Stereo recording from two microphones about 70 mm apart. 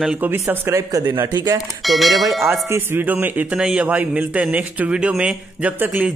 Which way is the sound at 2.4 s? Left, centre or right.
Right.